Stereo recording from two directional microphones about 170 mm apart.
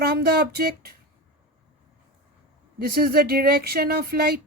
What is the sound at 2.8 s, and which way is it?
Speech, 65° right (ahead or behind).